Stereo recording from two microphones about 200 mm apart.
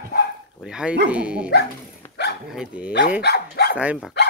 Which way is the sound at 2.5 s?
5° right (ahead or behind).